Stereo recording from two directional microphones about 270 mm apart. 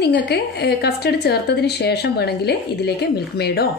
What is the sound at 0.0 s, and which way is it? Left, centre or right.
A woman's voice, left.